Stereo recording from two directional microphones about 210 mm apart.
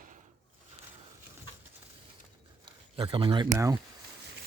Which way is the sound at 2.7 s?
25° right (ahead or behind).